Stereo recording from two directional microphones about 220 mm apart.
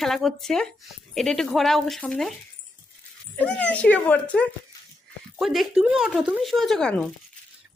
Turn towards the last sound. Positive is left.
turn(degrees=5)  # may be behind; listen again after turning